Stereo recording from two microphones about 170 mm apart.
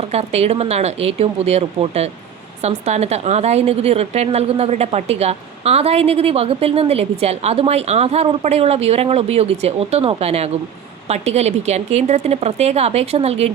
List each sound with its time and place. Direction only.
0.1 s a woman's voice: 40° right (ahead or behind)